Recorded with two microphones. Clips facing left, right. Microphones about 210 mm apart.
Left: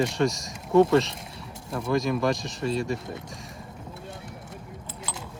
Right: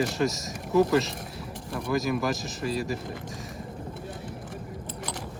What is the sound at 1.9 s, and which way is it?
Speech, 5° right (ahead or behind).